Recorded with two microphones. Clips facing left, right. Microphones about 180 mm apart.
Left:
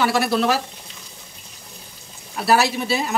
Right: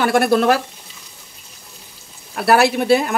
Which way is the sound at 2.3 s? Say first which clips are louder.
Right 4 dB; 60° right (ahead or behind).